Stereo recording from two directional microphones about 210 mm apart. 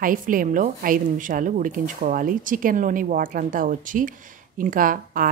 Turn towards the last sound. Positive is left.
turn(degrees=-40)  # may be behind; listen again after turning